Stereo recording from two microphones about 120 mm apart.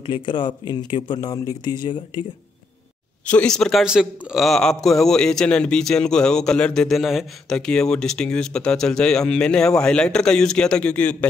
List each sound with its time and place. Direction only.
0.0 s speech: 45° left (ahead or behind)
3.3 s a man's voice: 10° left (ahead or behind)